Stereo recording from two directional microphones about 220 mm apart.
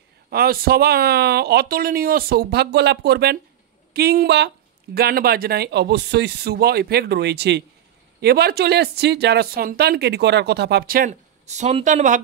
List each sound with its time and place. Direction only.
0.3 s speech: 45° right (ahead or behind)